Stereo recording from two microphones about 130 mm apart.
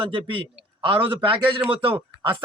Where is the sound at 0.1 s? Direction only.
40° right (ahead or behind).